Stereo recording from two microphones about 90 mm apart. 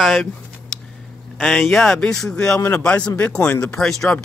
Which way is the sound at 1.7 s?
5° left (ahead or behind).